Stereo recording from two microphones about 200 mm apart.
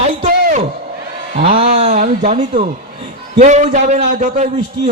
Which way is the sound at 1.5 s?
35° right (ahead or behind).